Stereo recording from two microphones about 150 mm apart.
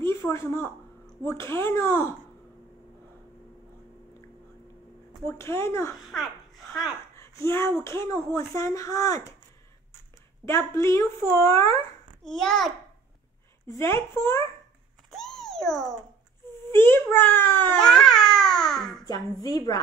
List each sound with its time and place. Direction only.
0.0 s a woman's voice: 20° left (ahead or behind)
5.2 s speech: 20° left (ahead or behind)
5.9 s a child's voice: centre (ahead or behind)
7.2 s a sound: 20° left (ahead or behind)
7.8 s speech: 20° left (ahead or behind)
10.4 s speech: 20° left (ahead or behind)
12.2 s a child's voice: 5° left (ahead or behind)
13.7 s a child's voice: 20° left (ahead or behind)
15.0 s a sound: 5° left (ahead or behind)
16.7 s a child's voice: 15° left (ahead or behind)
17.8 s babbling: 5° left (ahead or behind)
19.4 s speech: 25° left (ahead or behind)